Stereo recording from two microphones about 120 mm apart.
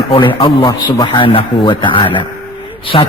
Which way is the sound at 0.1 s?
45° left (ahead or behind).